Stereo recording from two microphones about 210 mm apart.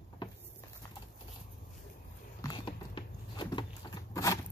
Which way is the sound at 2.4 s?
25° left (ahead or behind).